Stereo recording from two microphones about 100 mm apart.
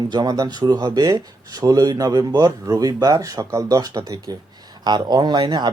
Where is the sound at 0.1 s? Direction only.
45° right (ahead or behind).